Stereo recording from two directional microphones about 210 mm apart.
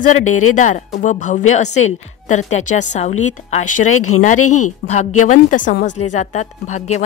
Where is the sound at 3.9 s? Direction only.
90° left.